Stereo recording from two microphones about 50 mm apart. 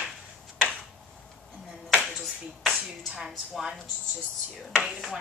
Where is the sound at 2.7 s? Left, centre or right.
Centre.